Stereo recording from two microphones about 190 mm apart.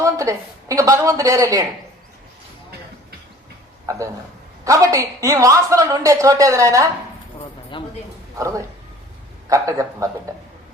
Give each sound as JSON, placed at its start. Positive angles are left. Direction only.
{"t": 0.0, "sound": "a woman's voice", "side_deg": -15}
{"t": 3.8, "sound": "speech", "side_deg": -15}
{"t": 7.7, "sound": "a man's voice", "side_deg": 25}
{"t": 8.4, "sound": "speech", "side_deg": -15}